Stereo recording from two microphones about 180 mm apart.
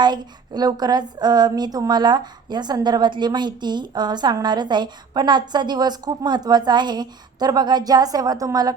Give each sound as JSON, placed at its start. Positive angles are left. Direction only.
{"t": 0.0, "sound": "a woman's voice", "side_deg": -25}